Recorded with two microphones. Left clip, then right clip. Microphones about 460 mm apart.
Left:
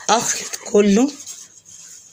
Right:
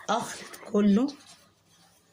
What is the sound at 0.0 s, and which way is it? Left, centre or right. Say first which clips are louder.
Speech: left 11 dB; right.